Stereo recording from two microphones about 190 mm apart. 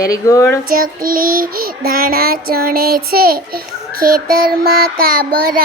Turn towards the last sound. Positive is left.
turn(degrees=-50)  # may be behind; listen again after turning